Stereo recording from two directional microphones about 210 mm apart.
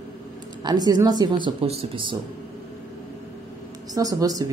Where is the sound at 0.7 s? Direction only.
20° right (ahead or behind).